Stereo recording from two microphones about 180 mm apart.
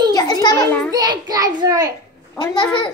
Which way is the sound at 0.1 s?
20° left (ahead or behind).